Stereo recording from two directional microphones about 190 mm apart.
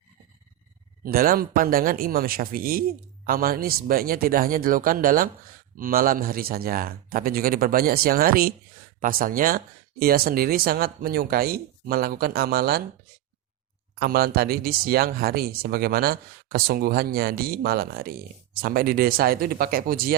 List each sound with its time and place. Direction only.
1.0 s speech: 50° right (ahead or behind)
14.0 s speech: 55° right (ahead or behind)